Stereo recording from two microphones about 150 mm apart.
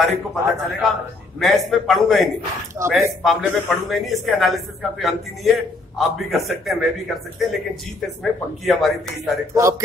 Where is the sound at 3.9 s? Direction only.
Centre (ahead or behind).